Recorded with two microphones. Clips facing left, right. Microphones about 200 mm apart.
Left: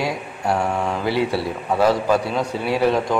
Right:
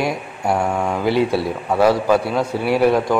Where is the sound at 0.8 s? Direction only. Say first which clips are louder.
Right 3 dB; 10° right (ahead or behind).